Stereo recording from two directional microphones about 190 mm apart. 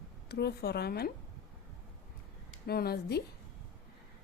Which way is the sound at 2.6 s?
55° left (ahead or behind).